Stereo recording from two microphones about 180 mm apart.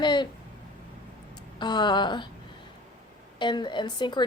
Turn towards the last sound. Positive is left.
turn(degrees=25)  # may be behind; listen again after turning